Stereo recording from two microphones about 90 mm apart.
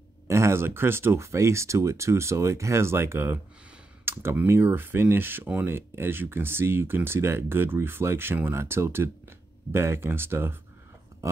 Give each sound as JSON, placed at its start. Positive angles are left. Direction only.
{"t": 0.3, "sound": "speech", "side_deg": -30}
{"t": 4.0, "sound": "a sound", "side_deg": -25}
{"t": 4.5, "sound": "speech", "side_deg": -25}